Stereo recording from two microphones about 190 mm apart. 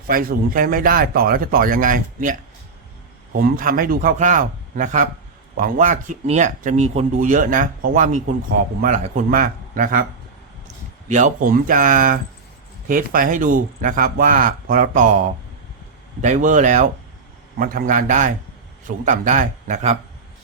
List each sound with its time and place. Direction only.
0.1 s speech: 50° right (ahead or behind)
11.1 s speech: 45° right (ahead or behind)
16.2 s speech: 40° right (ahead or behind)